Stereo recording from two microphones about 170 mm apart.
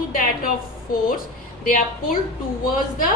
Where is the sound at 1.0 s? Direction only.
55° left (ahead or behind).